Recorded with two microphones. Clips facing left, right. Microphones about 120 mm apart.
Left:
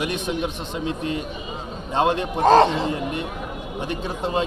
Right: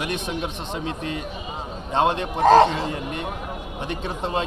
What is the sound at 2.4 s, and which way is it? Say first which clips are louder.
Speech: right 1 dB; 25° left (ahead or behind).